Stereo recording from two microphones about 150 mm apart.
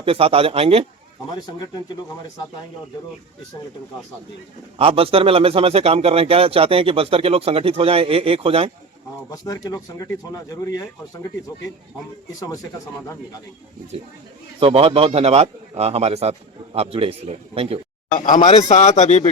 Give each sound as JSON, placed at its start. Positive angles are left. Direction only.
{"t": 0.0, "sound": "speech", "side_deg": -40}
{"t": 1.4, "sound": "speech", "side_deg": 25}
{"t": 4.8, "sound": "speech", "side_deg": -40}
{"t": 9.3, "sound": "speech", "side_deg": 25}
{"t": 14.6, "sound": "a man's voice", "side_deg": -40}
{"t": 18.3, "sound": "a man's voice", "side_deg": 55}